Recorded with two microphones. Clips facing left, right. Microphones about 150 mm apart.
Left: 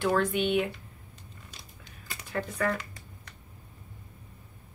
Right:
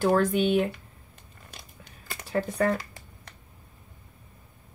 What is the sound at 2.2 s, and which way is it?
Speech, 35° right (ahead or behind).